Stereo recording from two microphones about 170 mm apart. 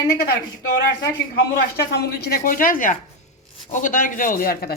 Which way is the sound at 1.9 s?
65° left (ahead or behind).